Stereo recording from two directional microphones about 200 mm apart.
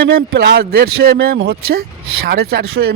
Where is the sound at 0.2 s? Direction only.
55° right (ahead or behind).